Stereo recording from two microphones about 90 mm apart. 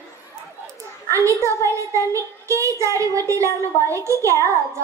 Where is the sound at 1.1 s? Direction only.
35° right (ahead or behind).